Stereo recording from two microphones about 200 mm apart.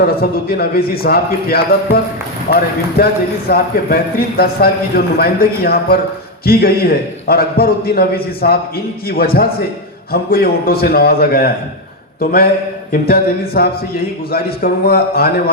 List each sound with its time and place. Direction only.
0.0 s a man's voice: 50° left (ahead or behind)